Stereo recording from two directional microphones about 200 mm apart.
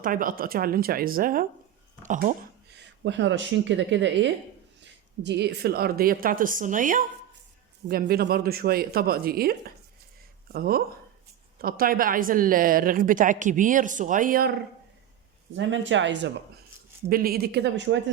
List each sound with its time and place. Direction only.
0.0 s a woman's voice: 45° right (ahead or behind)
3.0 s a woman's voice: 65° right (ahead or behind); by 14.5 s 45° right (ahead or behind)
15.5 s speech: 70° right (ahead or behind)
17.1 s a woman's voice: 50° right (ahead or behind); by 18.0 s 65° right (ahead or behind)